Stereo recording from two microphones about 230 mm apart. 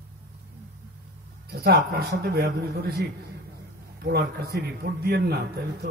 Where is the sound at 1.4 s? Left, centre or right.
Right.